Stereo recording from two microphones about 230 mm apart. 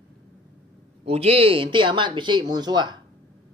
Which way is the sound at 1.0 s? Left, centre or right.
Right.